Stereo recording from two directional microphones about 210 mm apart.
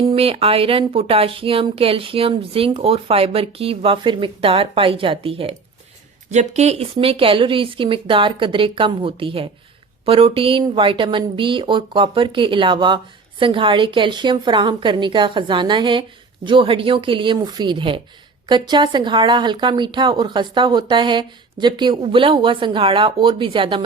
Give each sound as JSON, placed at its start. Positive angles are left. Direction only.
{"t": 0.2, "sound": "speech", "side_deg": -25}